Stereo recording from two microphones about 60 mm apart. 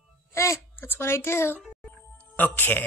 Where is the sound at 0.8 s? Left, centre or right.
Left.